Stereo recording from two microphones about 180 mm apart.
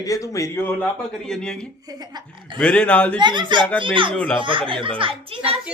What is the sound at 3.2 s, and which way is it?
A child's voice, 25° right (ahead or behind).